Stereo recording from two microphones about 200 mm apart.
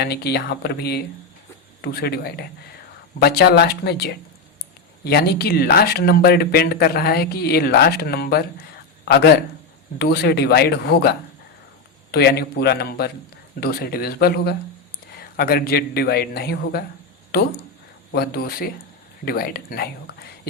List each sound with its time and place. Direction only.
0.0 s a man's voice: 55° left (ahead or behind)
18.1 s speech: 50° left (ahead or behind)